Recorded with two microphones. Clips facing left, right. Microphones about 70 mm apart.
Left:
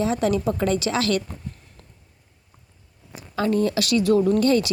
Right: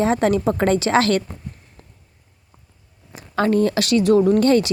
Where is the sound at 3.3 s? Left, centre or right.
Right.